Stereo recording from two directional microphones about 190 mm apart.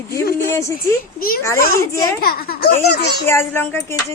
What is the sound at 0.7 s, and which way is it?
A child's voice, 50° left (ahead or behind).